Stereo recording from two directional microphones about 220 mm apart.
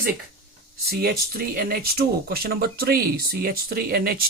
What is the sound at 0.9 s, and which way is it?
Speech, 45° right (ahead or behind).